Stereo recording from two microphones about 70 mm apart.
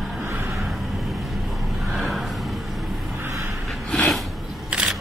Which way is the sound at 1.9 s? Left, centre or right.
Centre.